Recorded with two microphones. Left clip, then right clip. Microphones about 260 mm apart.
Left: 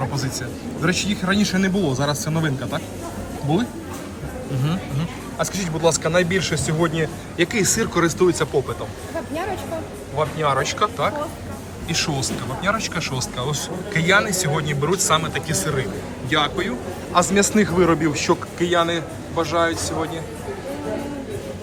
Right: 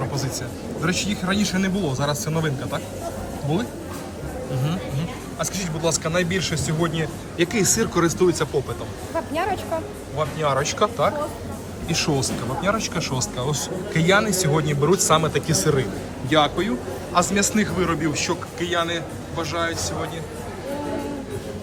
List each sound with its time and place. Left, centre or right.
0.8 s a man's voice: centre
4.6 s speech: centre
10.2 s a man's voice: centre
17.2 s a man's voice: centre